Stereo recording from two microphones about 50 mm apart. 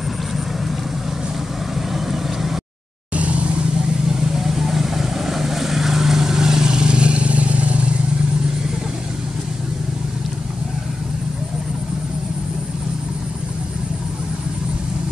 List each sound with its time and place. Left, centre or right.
3.2 s vehicle: right
4.4 s vehicle: centre; by 7.9 s right